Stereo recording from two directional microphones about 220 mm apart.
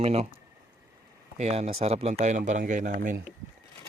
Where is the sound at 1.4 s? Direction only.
30° right (ahead or behind).